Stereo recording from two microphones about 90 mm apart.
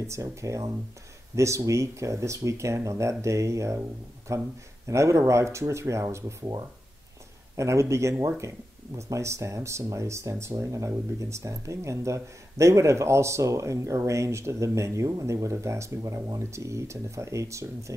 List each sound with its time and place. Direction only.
0.0 s speech: 35° right (ahead or behind)
7.5 s speech: 35° right (ahead or behind)